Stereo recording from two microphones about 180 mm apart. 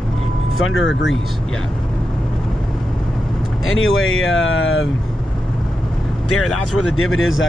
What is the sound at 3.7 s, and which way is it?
Speech, 90° left.